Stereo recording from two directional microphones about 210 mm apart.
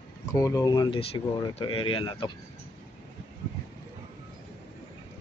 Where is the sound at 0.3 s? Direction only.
15° left (ahead or behind).